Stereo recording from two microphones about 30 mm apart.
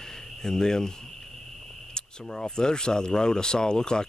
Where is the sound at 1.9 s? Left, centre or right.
Left.